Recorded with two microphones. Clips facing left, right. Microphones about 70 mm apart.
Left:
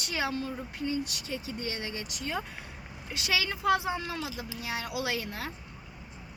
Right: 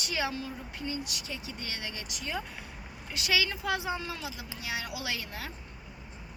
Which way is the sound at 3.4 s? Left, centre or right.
Left.